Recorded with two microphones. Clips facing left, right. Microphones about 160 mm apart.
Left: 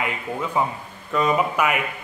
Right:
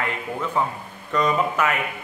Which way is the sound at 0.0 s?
10° left (ahead or behind).